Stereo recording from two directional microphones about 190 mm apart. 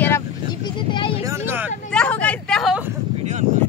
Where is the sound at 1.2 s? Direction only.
15° right (ahead or behind).